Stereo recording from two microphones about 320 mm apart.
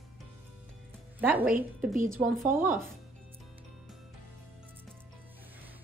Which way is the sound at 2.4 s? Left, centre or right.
Right.